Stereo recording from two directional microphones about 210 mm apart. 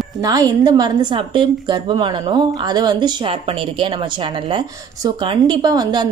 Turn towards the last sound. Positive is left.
turn(degrees=-20)  # may be behind; listen again after turning